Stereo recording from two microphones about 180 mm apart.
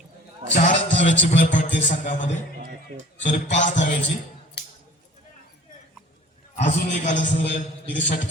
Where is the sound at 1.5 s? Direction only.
45° left (ahead or behind).